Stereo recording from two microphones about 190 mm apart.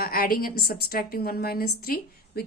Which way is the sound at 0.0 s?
50° left (ahead or behind).